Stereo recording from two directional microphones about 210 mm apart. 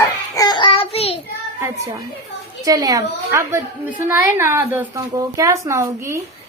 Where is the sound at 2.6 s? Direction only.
20° right (ahead or behind).